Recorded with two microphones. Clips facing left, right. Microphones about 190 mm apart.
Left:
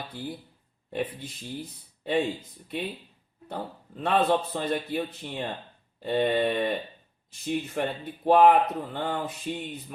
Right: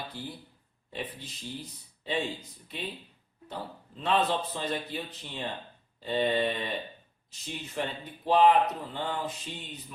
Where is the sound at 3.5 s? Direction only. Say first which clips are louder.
Left 4 dB; 55° left (ahead or behind).